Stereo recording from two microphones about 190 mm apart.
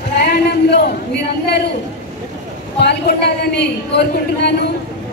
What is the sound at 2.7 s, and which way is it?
A man's voice, 60° left (ahead or behind).